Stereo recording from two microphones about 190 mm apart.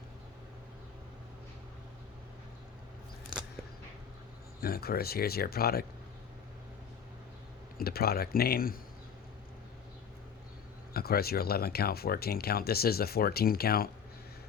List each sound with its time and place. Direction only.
4.6 s speech: 55° left (ahead or behind)
7.8 s speech: 55° left (ahead or behind)
10.9 s speech: 55° left (ahead or behind)